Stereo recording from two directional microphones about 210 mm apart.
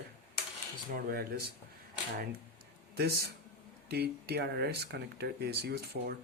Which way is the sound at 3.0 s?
50° right (ahead or behind).